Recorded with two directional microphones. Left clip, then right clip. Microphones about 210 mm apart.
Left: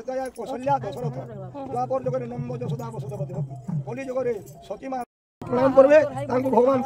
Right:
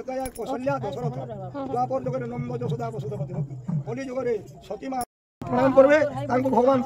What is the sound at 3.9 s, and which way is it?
Music, 20° left (ahead or behind).